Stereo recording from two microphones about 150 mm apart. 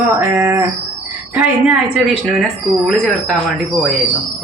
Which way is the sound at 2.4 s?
5° left (ahead or behind).